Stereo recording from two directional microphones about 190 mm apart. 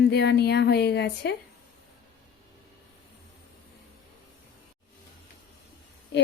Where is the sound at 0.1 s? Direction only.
60° left (ahead or behind).